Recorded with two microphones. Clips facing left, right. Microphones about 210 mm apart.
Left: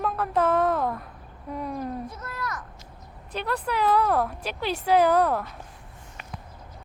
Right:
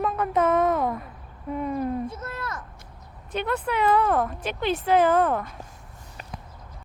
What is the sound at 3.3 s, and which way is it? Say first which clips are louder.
Speech: right 2 dB; 5° right (ahead or behind).